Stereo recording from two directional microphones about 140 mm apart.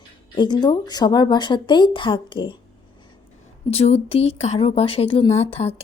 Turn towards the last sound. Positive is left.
turn(degrees=50)  # may be behind; listen again after turning